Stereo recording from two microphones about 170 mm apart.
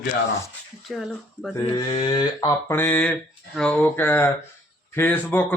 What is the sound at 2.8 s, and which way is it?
A man's voice, 10° left (ahead or behind).